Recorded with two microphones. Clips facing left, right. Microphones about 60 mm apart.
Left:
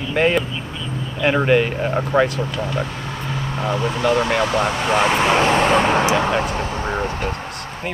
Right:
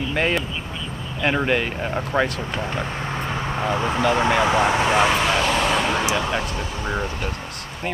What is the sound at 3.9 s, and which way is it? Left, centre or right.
Speech, centre.